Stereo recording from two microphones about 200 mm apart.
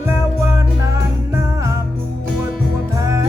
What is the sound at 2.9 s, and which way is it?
Music, 15° right (ahead or behind).